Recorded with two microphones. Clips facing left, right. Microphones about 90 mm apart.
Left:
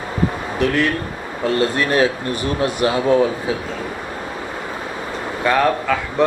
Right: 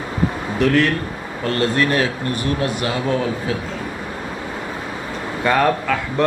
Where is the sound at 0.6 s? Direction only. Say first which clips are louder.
Right 2 dB; 5° left (ahead or behind).